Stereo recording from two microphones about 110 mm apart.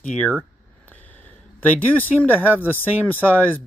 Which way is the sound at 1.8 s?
15° left (ahead or behind).